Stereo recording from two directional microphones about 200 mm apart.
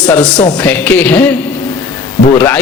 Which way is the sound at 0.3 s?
20° left (ahead or behind).